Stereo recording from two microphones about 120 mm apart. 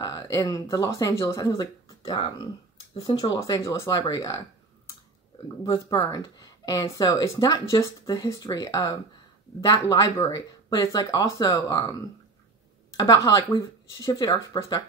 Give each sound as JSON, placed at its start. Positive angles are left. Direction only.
{"t": 0.0, "sound": "speech", "side_deg": 30}
{"t": 5.6, "sound": "speech", "side_deg": 30}
{"t": 12.9, "sound": "speech", "side_deg": 30}